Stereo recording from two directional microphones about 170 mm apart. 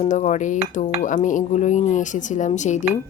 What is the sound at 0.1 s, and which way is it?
A woman's voice, 45° left (ahead or behind).